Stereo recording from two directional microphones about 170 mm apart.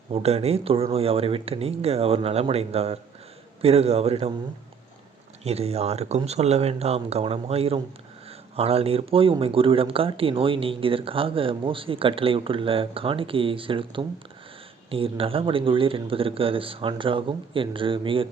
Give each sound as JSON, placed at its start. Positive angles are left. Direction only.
{"t": 0.1, "sound": "speech", "side_deg": -35}
{"t": 5.4, "sound": "speech", "side_deg": -35}